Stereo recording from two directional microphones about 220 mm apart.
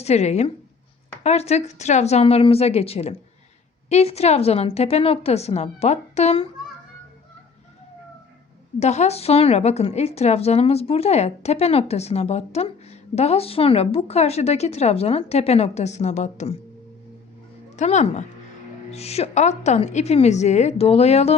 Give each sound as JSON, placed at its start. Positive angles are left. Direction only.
{"t": 0.0, "sound": "a woman's voice", "side_deg": 30}
{"t": 8.8, "sound": "a woman's voice", "side_deg": 30}
{"t": 17.7, "sound": "a woman's voice", "side_deg": 30}